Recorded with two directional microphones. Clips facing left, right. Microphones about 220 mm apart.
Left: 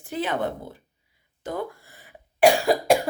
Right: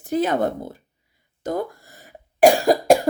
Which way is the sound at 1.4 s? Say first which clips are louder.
Right 5 dB; 40° right (ahead or behind).